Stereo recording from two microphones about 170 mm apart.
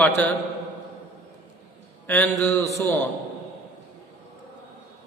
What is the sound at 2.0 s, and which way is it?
Speech, 15° left (ahead or behind).